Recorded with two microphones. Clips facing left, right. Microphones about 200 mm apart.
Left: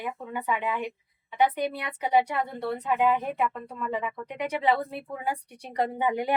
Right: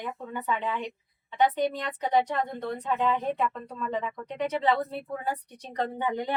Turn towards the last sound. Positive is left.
turn(degrees=10)  # may be behind; listen again after turning